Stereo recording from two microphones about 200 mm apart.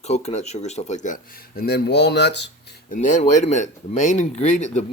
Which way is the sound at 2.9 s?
40° left (ahead or behind).